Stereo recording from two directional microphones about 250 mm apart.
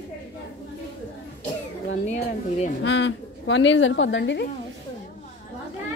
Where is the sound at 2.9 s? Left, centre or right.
Left.